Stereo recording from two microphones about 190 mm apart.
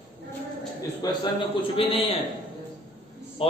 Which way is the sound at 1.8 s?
30° left (ahead or behind).